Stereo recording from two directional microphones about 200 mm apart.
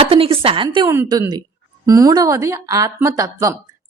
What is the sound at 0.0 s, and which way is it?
A woman's voice, 30° right (ahead or behind).